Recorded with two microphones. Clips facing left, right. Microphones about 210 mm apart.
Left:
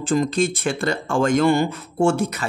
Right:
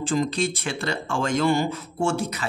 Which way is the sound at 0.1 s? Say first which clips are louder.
Left 5 dB; 50° left (ahead or behind).